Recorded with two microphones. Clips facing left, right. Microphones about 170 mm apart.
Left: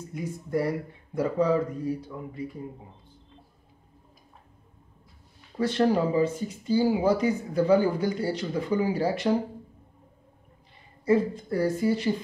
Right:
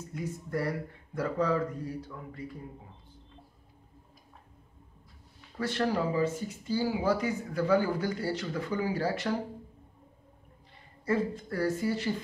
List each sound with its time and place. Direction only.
0.1 s speech: 15° left (ahead or behind)
5.6 s speech: 20° left (ahead or behind)
11.1 s speech: 15° left (ahead or behind)